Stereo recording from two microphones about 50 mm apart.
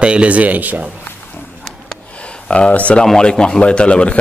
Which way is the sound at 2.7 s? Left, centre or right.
Left.